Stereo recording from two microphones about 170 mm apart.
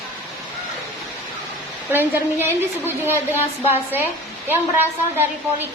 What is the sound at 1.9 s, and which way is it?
A woman's voice, 10° right (ahead or behind).